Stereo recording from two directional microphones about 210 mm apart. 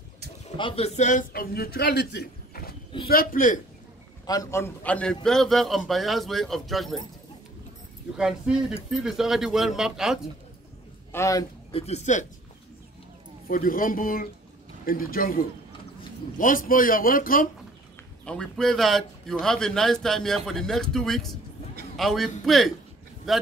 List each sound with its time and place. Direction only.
0.6 s a man's voice: 25° left (ahead or behind)
4.3 s speech: 15° left (ahead or behind)
8.2 s speech: 5° right (ahead or behind)
11.1 s speech: 15° left (ahead or behind)
11.7 s a man's voice: 30° left (ahead or behind)
13.5 s a man's voice: 40° left (ahead or behind)
18.2 s a man's voice: 5° left (ahead or behind)